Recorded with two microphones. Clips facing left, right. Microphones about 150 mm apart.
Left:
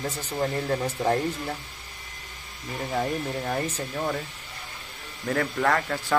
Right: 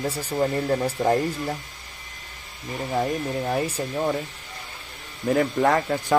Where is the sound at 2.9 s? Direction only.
10° right (ahead or behind).